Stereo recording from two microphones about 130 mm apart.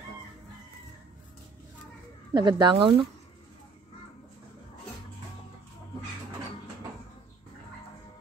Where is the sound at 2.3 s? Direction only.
35° right (ahead or behind).